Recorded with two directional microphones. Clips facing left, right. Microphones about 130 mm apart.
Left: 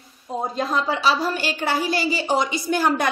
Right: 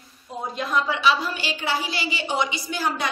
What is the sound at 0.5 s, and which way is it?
A woman's voice, 35° left (ahead or behind).